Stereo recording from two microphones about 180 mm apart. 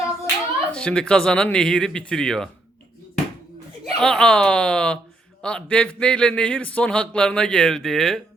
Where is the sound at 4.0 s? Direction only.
5° left (ahead or behind).